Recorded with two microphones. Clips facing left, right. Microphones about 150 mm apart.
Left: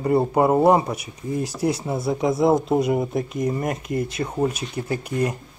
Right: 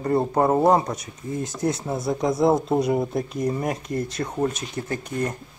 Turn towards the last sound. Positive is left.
turn(degrees=10)  # may be behind; listen again after turning